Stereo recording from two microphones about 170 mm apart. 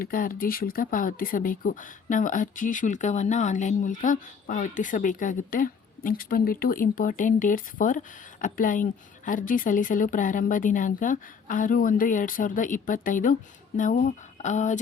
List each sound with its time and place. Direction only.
0.0 s speech: 55° left (ahead or behind)